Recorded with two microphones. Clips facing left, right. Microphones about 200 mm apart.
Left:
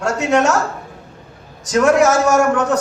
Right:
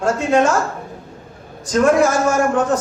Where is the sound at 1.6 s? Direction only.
75° left (ahead or behind).